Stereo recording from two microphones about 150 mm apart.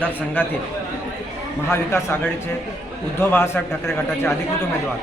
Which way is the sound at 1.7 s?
15° left (ahead or behind).